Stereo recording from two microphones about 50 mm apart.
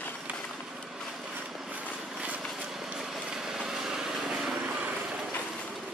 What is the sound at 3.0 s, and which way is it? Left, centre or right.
Vehicle, centre.